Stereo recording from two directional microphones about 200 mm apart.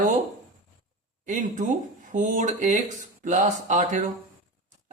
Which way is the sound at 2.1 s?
40° right (ahead or behind).